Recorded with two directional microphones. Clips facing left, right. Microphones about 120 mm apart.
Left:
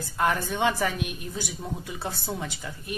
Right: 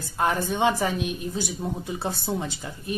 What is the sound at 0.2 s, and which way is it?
A woman's voice, 25° right (ahead or behind).